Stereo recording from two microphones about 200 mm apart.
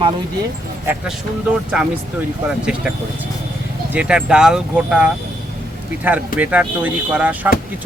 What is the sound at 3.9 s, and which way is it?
Speech, 5° right (ahead or behind).